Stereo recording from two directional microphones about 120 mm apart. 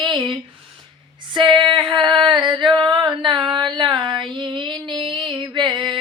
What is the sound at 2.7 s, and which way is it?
Child singing, 40° right (ahead or behind).